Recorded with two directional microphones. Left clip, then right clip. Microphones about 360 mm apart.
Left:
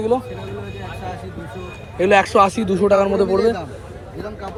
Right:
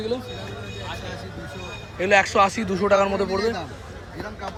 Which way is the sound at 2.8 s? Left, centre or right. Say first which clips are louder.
Left 4 dB; left.